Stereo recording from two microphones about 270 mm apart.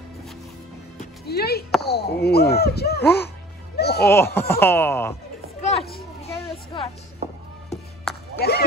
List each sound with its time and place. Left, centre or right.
1.2 s speech: left
3.7 s music: left
4.0 s speech: centre
5.6 s children playing: left
6.3 s a sound: centre
7.7 s music: centre
8.4 s a sound: left